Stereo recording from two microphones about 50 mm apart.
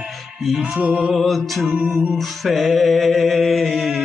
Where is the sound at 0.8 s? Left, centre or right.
Right.